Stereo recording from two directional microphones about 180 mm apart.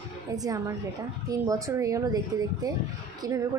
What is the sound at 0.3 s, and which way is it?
Speech, 20° right (ahead or behind).